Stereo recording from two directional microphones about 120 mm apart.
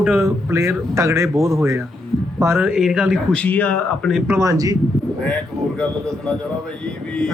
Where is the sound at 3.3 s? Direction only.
15° left (ahead or behind).